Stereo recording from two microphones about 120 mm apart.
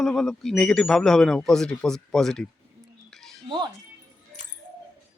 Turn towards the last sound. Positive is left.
turn(degrees=-40)  # may be behind; listen again after turning